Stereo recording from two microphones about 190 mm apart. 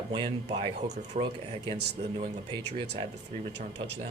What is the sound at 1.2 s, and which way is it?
Speech, 40° right (ahead or behind).